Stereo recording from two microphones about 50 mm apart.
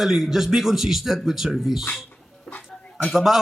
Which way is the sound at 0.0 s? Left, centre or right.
Centre.